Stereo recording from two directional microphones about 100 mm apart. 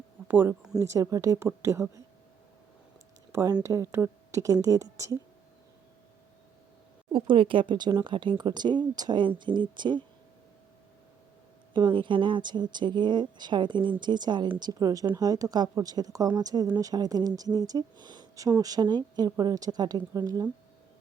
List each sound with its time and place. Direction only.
0.3 s speech: 20° right (ahead or behind)
0.8 s speech: 30° right (ahead or behind)
3.3 s speech: 35° right (ahead or behind)
7.1 s speech: 60° right (ahead or behind)
11.7 s speech: 55° right (ahead or behind)